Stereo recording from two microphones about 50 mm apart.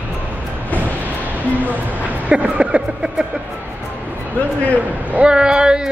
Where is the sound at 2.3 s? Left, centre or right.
Right.